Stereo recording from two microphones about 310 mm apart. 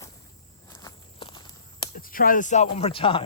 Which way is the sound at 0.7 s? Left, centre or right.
Centre.